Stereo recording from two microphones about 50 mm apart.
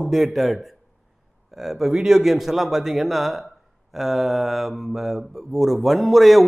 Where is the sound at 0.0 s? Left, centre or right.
Centre.